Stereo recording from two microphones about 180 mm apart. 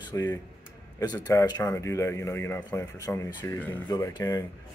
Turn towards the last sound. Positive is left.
turn(degrees=20)  # may be behind; listen again after turning